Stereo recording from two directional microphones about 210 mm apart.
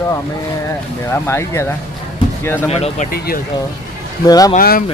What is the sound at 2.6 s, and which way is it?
Speech, 30° left (ahead or behind).